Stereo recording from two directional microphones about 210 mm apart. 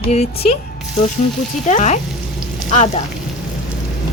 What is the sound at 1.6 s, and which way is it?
Speech, 35° left (ahead or behind).